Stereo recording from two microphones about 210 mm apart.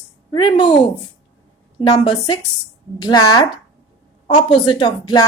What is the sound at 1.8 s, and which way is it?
A woman's voice, 20° left (ahead or behind).